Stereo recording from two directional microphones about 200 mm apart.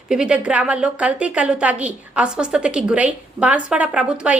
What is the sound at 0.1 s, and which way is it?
A woman's voice, 5° right (ahead or behind).